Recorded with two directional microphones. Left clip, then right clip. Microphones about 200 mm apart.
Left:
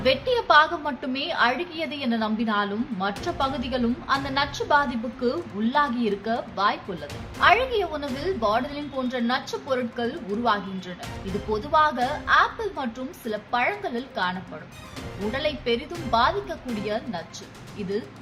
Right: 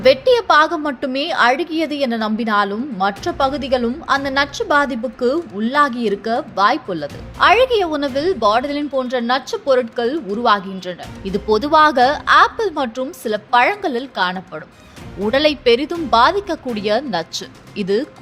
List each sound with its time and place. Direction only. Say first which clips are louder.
0.0 s a woman's voice: right 10 dB; 35° right (ahead or behind)